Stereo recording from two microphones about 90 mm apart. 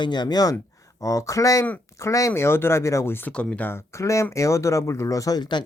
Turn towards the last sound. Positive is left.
turn(degrees=45)  # may be behind; listen again after turning